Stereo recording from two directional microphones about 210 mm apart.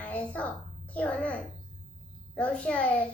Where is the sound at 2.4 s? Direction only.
5° left (ahead or behind).